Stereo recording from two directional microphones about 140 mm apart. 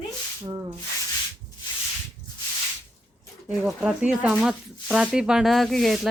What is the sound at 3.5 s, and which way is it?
Speech, 5° right (ahead or behind).